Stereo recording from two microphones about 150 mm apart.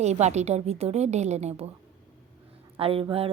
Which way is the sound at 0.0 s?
50° right (ahead or behind).